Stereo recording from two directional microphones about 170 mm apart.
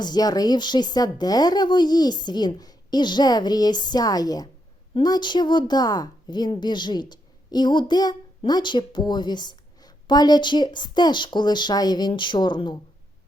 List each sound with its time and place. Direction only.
0.0 s a woman's voice: 25° left (ahead or behind)